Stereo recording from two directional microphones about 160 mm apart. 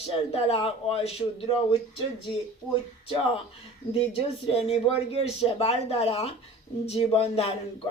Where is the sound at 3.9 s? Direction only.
35° left (ahead or behind).